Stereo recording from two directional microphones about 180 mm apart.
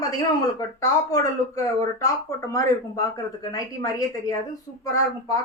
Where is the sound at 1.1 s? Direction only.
20° left (ahead or behind).